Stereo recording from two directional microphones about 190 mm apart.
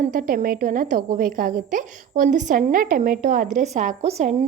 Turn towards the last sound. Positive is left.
turn(degrees=-40)  # may be behind; listen again after turning